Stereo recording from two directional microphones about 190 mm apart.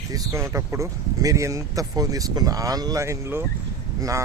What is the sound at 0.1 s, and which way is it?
A man's voice, 15° right (ahead or behind).